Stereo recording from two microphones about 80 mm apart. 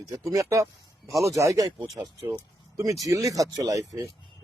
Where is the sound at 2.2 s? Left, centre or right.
Right.